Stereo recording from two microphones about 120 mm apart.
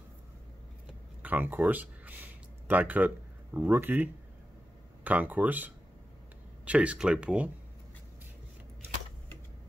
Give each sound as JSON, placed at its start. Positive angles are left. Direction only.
{"t": 1.2, "sound": "speech", "side_deg": -15}